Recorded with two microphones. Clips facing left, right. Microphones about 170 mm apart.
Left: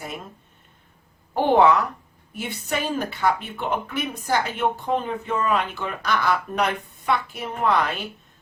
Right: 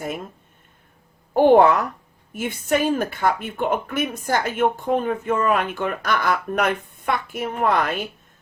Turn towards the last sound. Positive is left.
turn(degrees=-50)  # may be behind; listen again after turning